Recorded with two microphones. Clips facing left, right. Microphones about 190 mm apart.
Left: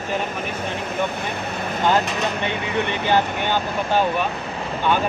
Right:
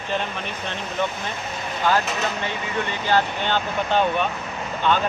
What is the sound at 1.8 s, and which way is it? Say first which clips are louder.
Speech: left 2 dB; 20° left (ahead or behind).